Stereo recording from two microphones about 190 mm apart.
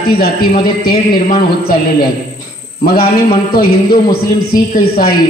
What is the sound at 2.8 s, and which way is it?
A man's voice, 50° left (ahead or behind).